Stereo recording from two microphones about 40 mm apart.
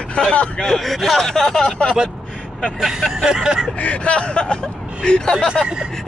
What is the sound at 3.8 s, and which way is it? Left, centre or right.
Speech, left.